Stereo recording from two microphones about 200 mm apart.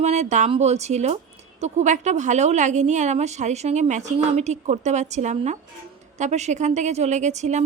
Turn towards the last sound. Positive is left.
turn(degrees=-35)  # may be behind; listen again after turning